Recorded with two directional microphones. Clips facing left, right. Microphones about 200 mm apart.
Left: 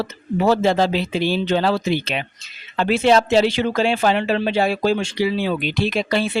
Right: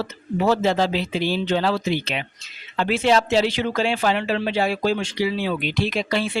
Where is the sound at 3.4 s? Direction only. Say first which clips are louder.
Left 3 dB; 30° left (ahead or behind).